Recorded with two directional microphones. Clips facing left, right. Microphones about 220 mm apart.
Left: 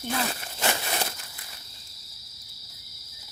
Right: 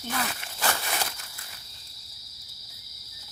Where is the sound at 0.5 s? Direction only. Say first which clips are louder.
Left 1 dB; 25° left (ahead or behind).